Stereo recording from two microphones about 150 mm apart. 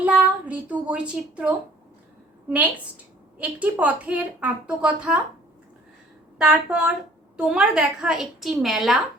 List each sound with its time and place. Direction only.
0.0 s speech: 10° right (ahead or behind)
3.3 s a woman's voice: 10° right (ahead or behind)
6.4 s a woman's voice: 5° right (ahead or behind)